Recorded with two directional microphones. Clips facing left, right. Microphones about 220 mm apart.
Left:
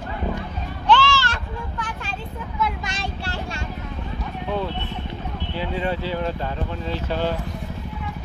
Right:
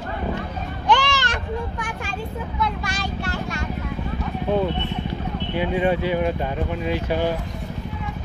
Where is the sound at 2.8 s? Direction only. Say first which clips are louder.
Right 3 dB; 25° left (ahead or behind).